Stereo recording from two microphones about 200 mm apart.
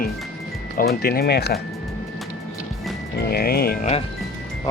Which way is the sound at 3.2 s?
50° left (ahead or behind).